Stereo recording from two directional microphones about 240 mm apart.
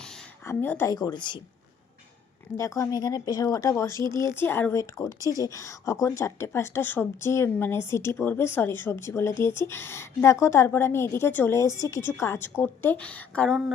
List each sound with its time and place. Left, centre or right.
0.0 s speech: centre
2.6 s a woman's voice: centre